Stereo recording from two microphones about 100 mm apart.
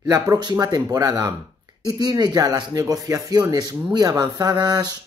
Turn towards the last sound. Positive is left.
turn(degrees=-45)  # may be behind; listen again after turning